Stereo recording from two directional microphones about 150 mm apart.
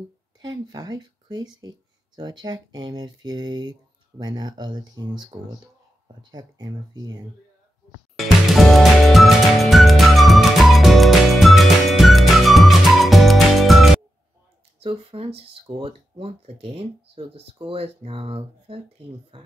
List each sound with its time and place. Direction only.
0.4 s speech: 25° right (ahead or behind)
8.2 s music: centre (ahead or behind)
14.8 s speech: 40° right (ahead or behind)